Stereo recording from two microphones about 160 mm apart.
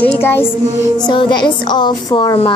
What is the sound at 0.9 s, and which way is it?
Speech, 30° left (ahead or behind).